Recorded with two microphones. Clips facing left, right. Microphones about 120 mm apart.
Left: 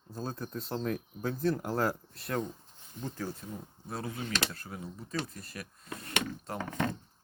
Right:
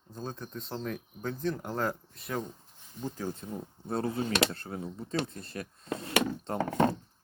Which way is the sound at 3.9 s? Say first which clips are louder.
Right 6 dB; 30° right (ahead or behind).